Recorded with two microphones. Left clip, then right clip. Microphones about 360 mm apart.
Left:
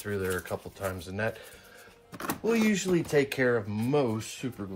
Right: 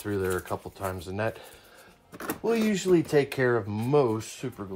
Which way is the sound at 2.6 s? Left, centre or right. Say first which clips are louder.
Even; right.